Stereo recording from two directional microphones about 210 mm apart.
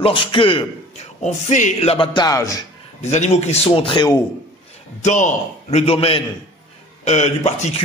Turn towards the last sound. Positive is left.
turn(degrees=35)  # may be behind; listen again after turning